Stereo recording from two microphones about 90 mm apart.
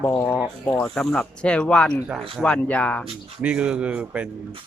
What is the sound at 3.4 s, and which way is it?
Speech, 10° right (ahead or behind).